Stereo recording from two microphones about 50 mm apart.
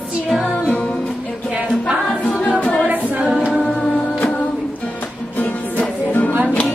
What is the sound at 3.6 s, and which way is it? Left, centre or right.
Music, centre.